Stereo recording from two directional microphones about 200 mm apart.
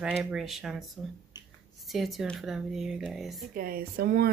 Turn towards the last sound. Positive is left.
turn(degrees=-50)  # may be behind; listen again after turning